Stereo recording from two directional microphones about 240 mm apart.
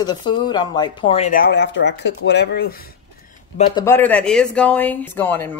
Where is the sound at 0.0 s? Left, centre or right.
Centre; by 2.9 s left.